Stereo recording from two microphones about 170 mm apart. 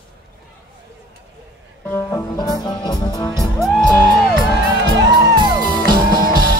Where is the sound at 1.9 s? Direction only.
15° left (ahead or behind).